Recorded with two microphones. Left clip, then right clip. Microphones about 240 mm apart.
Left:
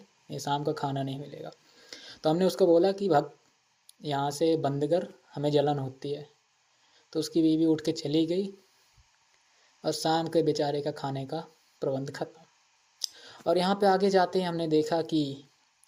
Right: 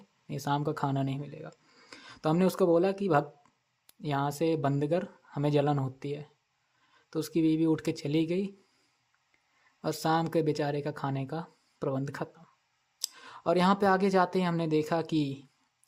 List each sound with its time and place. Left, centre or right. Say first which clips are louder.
0.3 s speech: left 2 dB; right
9.8 s speech: left 1 dB; right